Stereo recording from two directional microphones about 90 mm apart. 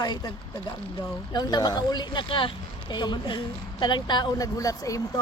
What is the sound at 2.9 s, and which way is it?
A woman's voice, 55° left (ahead or behind).